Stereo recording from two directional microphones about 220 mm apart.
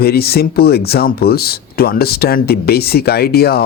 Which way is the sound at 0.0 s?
45° left (ahead or behind).